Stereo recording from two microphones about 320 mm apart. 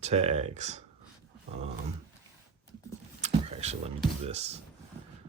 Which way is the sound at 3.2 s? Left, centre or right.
Right.